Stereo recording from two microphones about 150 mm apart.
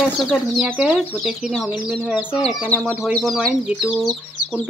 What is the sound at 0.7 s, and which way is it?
Speech, 10° right (ahead or behind).